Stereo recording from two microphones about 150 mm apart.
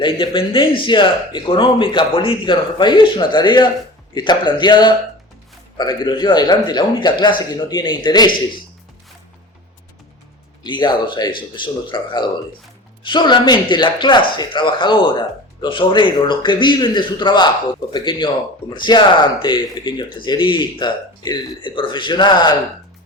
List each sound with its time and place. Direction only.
0.0 s a man's voice: 35° left (ahead or behind)
10.6 s speech: 30° left (ahead or behind)